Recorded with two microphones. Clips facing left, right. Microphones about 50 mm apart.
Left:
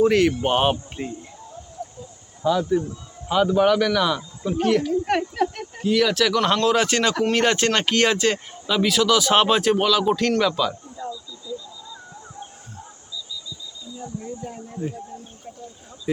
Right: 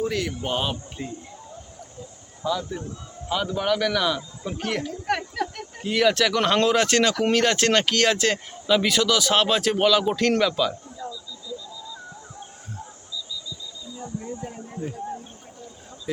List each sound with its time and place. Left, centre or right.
0.0 s speech: left
2.4 s speech: left
3.2 s speech: centre
5.0 s speech: centre
5.8 s speech: centre
9.7 s speech: centre
14.2 s a sound: centre
16.1 s speech: centre